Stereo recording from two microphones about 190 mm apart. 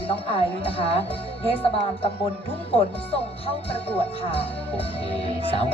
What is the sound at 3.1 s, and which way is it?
Speech, 30° left (ahead or behind).